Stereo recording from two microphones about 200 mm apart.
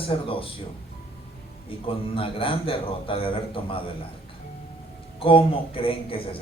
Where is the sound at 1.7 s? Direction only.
25° left (ahead or behind).